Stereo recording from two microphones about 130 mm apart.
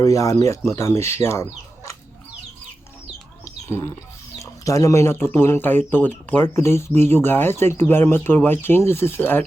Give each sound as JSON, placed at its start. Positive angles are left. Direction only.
{"t": 0.0, "sound": "speech", "side_deg": 25}
{"t": 3.4, "sound": "bird", "side_deg": 20}
{"t": 4.4, "sound": "speech", "side_deg": 25}